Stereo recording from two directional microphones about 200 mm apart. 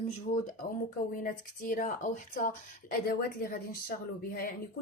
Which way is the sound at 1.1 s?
45° left (ahead or behind).